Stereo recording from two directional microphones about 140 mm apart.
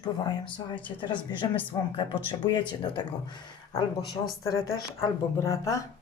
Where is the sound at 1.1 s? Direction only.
35° left (ahead or behind).